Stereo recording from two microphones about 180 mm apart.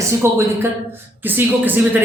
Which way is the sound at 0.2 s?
15° right (ahead or behind).